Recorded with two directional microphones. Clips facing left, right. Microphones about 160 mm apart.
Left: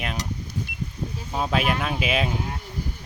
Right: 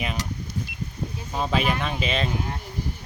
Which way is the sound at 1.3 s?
5° left (ahead or behind).